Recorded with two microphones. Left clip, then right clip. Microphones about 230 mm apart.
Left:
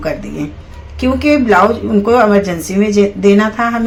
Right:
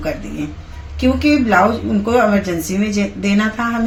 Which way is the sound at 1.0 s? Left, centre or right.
Centre.